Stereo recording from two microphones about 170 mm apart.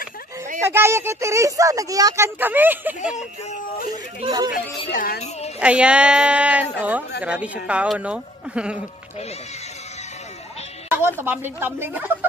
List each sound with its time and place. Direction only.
0.6 s speech: 15° right (ahead or behind)
3.9 s speech: 25° right (ahead or behind)
4.9 s speech: 60° left (ahead or behind)
5.6 s speech: 5° right (ahead or behind)
10.9 s speech: 10° right (ahead or behind)